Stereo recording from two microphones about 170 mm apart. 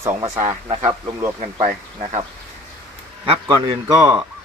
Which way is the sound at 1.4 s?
40° right (ahead or behind).